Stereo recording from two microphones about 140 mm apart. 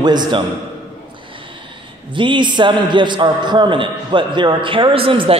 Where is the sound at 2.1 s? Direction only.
35° right (ahead or behind).